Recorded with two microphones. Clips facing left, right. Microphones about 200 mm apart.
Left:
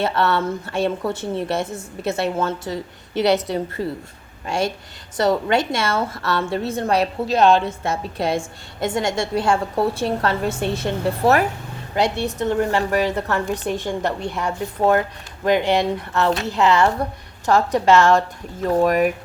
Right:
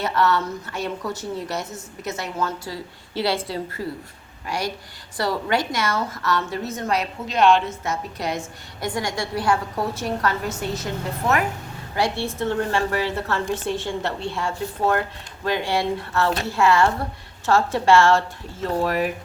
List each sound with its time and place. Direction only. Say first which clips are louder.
0.0 s a woman's voice: left 2 dB; 30° left (ahead or behind)
11.9 s a woman's voice: left 3 dB; 20° left (ahead or behind)